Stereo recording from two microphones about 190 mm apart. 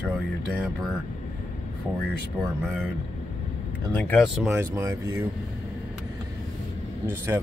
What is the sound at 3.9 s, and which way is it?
Speech, 5° left (ahead or behind).